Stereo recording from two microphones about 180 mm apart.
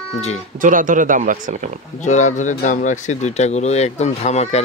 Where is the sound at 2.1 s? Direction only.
40° left (ahead or behind).